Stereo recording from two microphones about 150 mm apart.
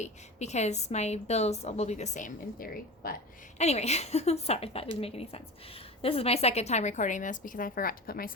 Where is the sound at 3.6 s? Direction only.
45° left (ahead or behind).